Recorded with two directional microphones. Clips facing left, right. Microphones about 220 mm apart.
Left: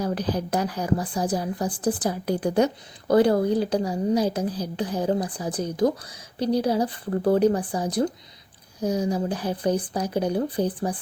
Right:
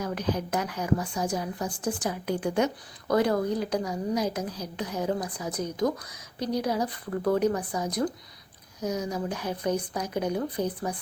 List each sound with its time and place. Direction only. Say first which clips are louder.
0.0 s a woman's voice: left 3 dB; 35° left (ahead or behind)